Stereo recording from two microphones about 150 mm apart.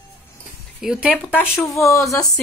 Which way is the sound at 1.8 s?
20° left (ahead or behind).